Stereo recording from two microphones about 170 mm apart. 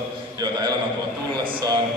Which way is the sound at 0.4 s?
25° right (ahead or behind).